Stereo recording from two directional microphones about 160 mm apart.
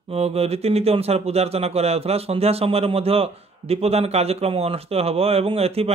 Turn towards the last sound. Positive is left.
turn(degrees=-40)  # may be behind; listen again after turning